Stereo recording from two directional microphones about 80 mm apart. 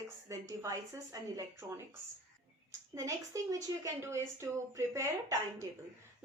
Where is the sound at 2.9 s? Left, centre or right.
Right.